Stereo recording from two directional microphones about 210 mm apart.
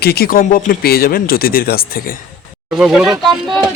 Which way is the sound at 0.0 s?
50° left (ahead or behind).